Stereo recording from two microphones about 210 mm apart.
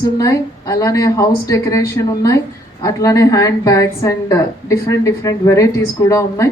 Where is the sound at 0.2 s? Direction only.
15° left (ahead or behind).